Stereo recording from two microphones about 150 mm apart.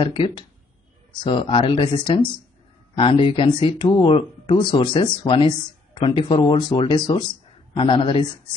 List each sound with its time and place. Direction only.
0.0 s speech: 35° left (ahead or behind)